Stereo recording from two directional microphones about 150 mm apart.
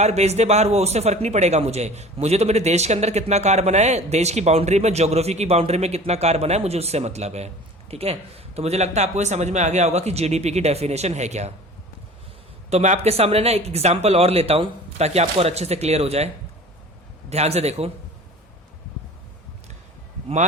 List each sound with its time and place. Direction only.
0.0 s speech: 45° right (ahead or behind)
12.7 s speech: 50° right (ahead or behind)